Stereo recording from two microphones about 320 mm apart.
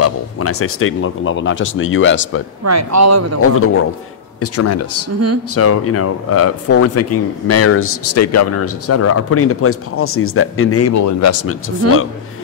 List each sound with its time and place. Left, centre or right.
0.0 s speech: left
2.6 s speech: right
3.5 s speech: left